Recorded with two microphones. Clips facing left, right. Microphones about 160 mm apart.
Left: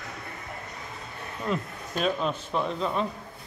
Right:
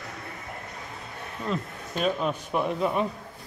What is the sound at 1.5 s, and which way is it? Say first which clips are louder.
Speech: left 1 dB; centre (ahead or behind).